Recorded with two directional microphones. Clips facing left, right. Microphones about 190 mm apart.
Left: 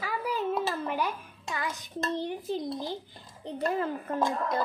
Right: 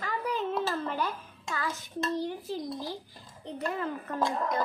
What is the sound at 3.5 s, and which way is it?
Speech, 35° left (ahead or behind).